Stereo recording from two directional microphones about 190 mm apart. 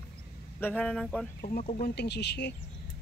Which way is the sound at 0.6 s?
5° left (ahead or behind).